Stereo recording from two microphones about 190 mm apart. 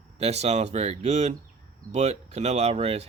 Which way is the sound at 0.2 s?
35° right (ahead or behind).